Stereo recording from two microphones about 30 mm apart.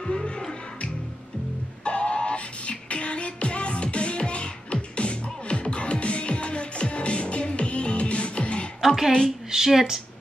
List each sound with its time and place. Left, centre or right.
0.0 s music: left
1.9 s music: left
8.8 s a woman's voice: centre
9.5 s speech: centre